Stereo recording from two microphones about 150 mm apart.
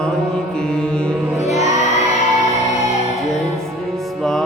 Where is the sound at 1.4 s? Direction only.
50° left (ahead or behind).